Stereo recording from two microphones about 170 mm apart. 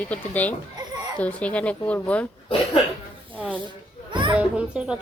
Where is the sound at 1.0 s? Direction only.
25° right (ahead or behind).